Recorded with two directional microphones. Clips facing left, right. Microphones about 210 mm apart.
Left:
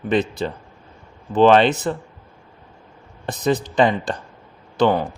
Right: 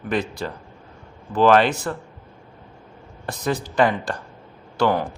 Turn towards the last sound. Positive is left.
turn(degrees=20)  # may be behind; listen again after turning